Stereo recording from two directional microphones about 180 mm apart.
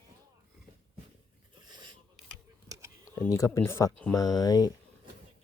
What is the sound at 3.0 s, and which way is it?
Speech, 20° left (ahead or behind).